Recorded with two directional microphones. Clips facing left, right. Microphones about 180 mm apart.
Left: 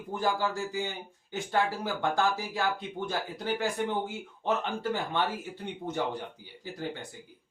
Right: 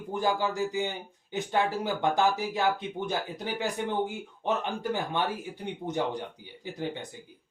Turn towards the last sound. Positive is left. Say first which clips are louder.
# right 3 dB
turn(degrees=-20)  # may be behind; listen again after turning